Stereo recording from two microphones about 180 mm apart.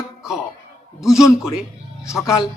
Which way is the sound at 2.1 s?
15° left (ahead or behind).